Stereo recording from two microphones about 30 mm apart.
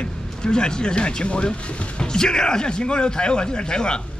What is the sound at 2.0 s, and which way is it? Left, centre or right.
Speech, left.